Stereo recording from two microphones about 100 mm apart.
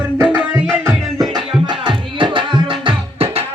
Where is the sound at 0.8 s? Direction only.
40° right (ahead or behind).